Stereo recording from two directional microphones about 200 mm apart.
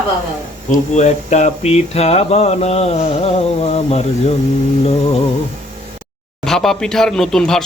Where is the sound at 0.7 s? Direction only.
35° left (ahead or behind).